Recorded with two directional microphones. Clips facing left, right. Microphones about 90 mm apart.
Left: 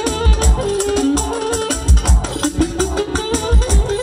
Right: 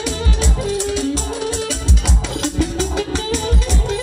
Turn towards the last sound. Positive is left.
turn(degrees=40)  # may be behind; listen again after turning